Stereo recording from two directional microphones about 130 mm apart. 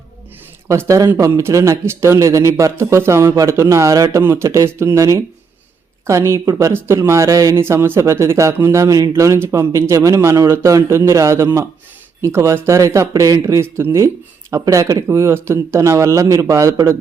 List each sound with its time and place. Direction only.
0.7 s a man's voice: 25° right (ahead or behind)